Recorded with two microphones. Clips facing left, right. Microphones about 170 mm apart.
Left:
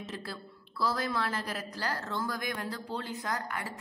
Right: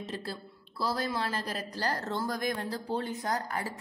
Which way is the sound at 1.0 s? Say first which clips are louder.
Even; 30° right (ahead or behind).